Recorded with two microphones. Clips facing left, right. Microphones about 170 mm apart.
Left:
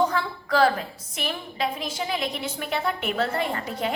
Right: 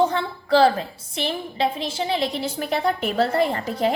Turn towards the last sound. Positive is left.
turn(degrees=-35)  # may be behind; listen again after turning